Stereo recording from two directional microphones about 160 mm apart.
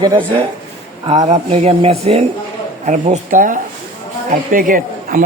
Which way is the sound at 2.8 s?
50° right (ahead or behind).